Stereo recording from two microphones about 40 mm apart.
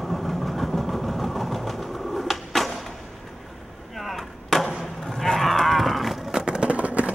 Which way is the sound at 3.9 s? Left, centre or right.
Centre.